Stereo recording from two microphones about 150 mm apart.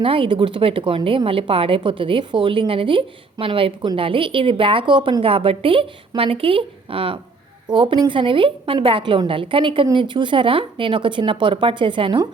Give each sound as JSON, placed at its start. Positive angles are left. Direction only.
{"t": 0.0, "sound": "a woman's voice", "side_deg": -35}